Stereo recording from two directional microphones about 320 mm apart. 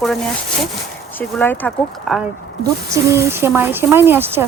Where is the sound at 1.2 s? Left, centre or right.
Centre.